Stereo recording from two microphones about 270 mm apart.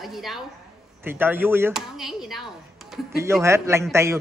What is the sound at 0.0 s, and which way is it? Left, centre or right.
A man's voice, centre.